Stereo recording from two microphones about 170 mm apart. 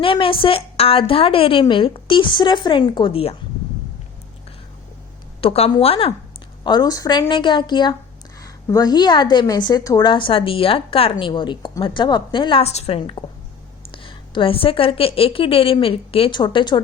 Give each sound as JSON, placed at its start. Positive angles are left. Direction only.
{"t": 0.0, "sound": "a woman's voice", "side_deg": 30}
{"t": 5.4, "sound": "a woman's voice", "side_deg": 35}
{"t": 6.7, "sound": "a woman's voice", "side_deg": 25}